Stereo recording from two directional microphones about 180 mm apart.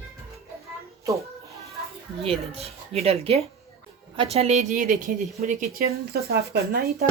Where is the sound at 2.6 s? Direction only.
35° right (ahead or behind).